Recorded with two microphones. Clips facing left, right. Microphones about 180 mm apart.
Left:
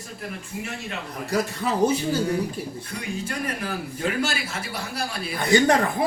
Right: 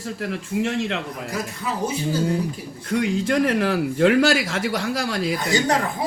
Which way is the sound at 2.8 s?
90° right.